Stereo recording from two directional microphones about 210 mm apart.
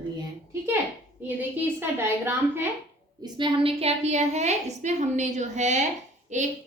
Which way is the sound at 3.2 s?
20° right (ahead or behind).